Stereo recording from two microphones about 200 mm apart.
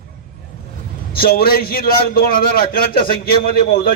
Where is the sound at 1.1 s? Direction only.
50° left (ahead or behind).